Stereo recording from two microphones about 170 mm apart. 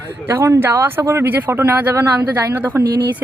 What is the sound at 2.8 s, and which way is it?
Speech, 70° right (ahead or behind).